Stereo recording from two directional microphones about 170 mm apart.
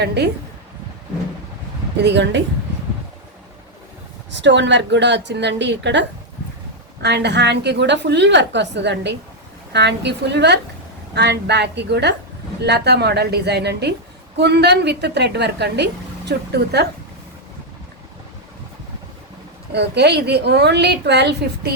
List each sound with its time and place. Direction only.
0.0 s a woman's voice: 75° right (ahead or behind)
2.0 s a woman's voice: 90° right
4.3 s a woman's voice: 90° right
19.7 s a woman's voice: 80° right